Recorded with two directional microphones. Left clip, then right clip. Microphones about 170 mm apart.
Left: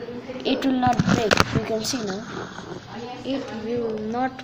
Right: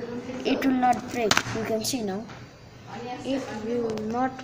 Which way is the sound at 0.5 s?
Centre (ahead or behind).